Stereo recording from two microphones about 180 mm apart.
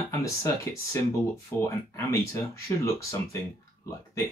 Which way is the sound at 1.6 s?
15° left (ahead or behind).